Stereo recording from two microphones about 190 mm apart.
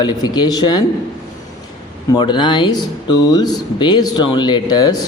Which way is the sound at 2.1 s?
25° left (ahead or behind).